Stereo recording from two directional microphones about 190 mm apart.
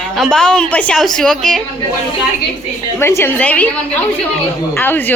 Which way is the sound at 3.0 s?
10° left (ahead or behind).